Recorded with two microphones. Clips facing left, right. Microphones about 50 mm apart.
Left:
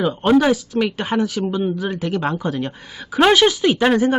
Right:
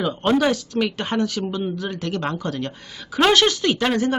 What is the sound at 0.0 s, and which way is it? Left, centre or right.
Speech, centre.